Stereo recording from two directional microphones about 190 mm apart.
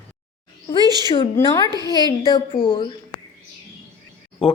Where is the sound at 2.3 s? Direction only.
25° left (ahead or behind).